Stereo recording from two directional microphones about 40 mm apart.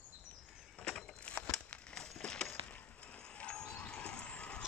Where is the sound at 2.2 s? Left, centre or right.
Left.